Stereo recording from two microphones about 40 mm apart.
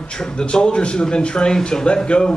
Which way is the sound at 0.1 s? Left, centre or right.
Left.